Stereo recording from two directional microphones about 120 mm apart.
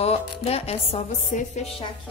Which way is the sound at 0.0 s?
60° left (ahead or behind).